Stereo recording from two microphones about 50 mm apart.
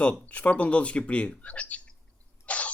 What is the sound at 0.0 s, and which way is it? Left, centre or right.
Speech, left.